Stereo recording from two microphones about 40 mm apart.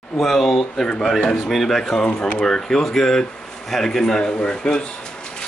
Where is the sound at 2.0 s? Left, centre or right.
Left.